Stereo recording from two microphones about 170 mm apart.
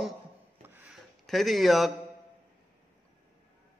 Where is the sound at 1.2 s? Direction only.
Centre (ahead or behind).